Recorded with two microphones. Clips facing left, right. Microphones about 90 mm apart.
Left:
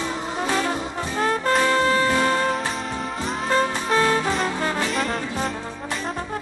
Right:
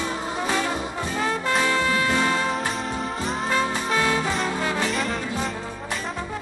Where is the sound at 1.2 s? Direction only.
40° left (ahead or behind).